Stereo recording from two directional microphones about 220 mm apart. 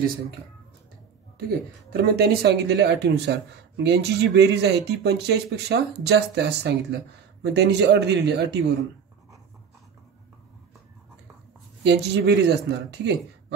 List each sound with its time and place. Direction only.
1.9 s speech: 45° right (ahead or behind)
11.8 s speech: 50° right (ahead or behind)